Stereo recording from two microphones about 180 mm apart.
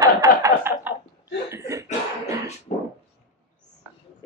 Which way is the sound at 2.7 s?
35° left (ahead or behind).